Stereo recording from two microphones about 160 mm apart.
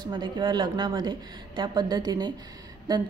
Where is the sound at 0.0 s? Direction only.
30° right (ahead or behind).